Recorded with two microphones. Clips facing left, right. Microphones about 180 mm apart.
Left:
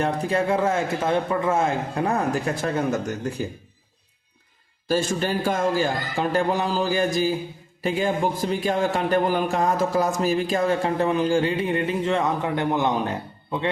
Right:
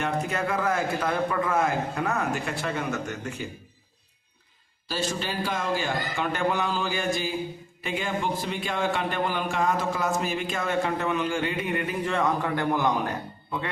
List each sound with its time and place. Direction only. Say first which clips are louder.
0.0 s speech: left 5 dB; 30° left (ahead or behind)
4.9 s speech: left 7 dB; 50° left (ahead or behind); by 13.7 s 25° left (ahead or behind)